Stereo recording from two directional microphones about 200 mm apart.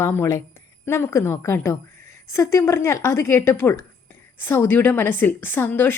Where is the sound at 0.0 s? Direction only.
15° left (ahead or behind).